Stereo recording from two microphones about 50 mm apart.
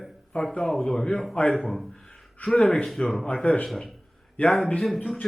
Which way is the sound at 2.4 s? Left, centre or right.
Centre.